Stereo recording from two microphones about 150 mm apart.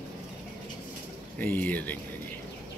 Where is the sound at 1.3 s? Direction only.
10° left (ahead or behind).